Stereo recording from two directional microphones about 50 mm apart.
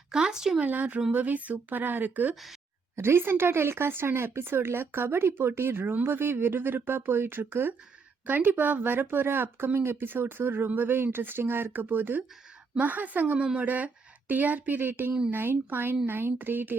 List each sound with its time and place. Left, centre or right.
0.1 s speech: centre
0.6 s speech: right
2.9 s speech: right
13.4 s speech: centre
13.7 s speech: right